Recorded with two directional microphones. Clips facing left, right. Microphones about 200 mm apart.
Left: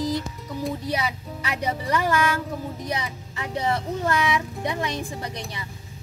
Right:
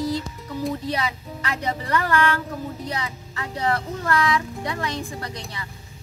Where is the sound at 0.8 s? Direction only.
10° left (ahead or behind).